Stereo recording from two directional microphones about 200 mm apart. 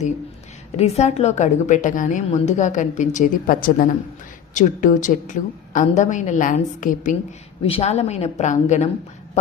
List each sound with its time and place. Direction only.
0.8 s a woman's voice: 30° left (ahead or behind)
7.6 s a woman's voice: 30° left (ahead or behind)